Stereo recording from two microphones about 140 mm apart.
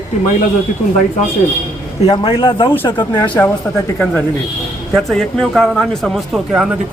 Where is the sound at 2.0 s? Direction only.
40° left (ahead or behind).